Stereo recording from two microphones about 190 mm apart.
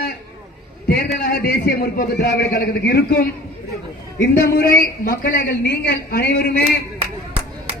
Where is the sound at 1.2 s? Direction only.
60° left (ahead or behind).